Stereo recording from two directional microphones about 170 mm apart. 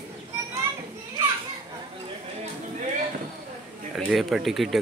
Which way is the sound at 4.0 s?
Centre (ahead or behind).